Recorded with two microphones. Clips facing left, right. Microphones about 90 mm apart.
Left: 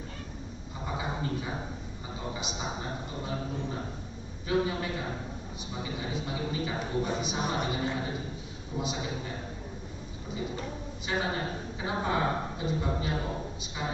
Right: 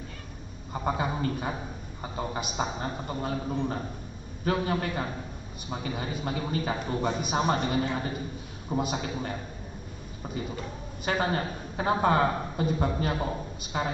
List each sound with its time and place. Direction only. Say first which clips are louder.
0.8 s a sound: right 5 dB; 55° right (ahead or behind)
2.1 s a man's voice: right 6 dB; 55° right (ahead or behind)
11.1 s a man's voice: right 4 dB; 55° right (ahead or behind)